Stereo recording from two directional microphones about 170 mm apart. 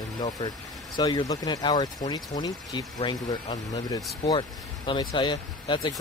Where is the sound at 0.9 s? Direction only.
25° left (ahead or behind).